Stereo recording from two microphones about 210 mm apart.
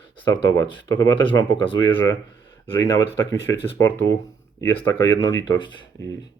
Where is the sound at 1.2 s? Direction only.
65° right (ahead or behind).